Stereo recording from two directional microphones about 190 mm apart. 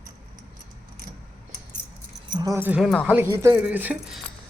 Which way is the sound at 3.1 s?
15° right (ahead or behind).